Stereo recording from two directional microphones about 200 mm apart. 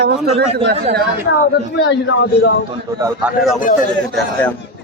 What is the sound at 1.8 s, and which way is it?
Speech, 65° left (ahead or behind).